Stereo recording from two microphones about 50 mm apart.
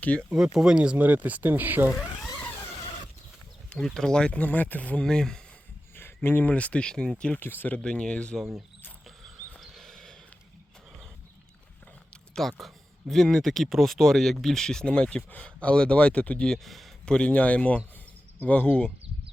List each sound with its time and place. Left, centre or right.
0.3 s speech: centre
0.9 s speech: right
3.8 s speech: centre
4.3 s speech: left
5.0 s speech: centre
6.0 s a sound: left
6.4 s speech: left
6.8 s speech: centre
7.3 s speech: left
7.9 s speech: centre
9.6 s a sound: centre
12.3 s speech: centre; by 16.5 s left
16.6 s speech: centre
17.1 s speech: left